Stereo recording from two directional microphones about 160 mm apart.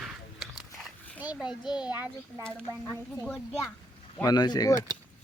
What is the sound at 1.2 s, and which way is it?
Speech, 5° right (ahead or behind).